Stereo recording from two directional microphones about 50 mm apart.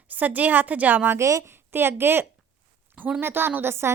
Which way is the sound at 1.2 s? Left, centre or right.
Right.